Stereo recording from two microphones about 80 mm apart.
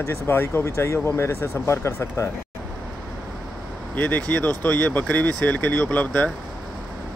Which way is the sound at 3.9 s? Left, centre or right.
Centre.